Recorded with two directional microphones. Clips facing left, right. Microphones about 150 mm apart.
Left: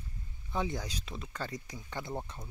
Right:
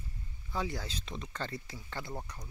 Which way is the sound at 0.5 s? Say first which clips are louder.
Left 2 dB; 20° left (ahead or behind).